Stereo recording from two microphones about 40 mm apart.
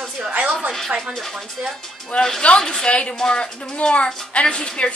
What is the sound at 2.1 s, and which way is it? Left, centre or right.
Speech, left.